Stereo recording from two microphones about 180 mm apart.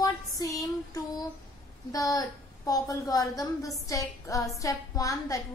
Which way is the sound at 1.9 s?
20° left (ahead or behind).